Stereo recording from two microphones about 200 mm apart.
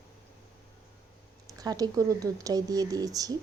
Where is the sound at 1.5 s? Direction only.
20° right (ahead or behind).